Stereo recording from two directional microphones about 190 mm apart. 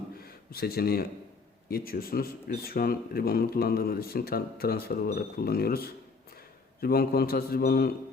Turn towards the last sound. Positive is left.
turn(degrees=55)  # may be behind; listen again after turning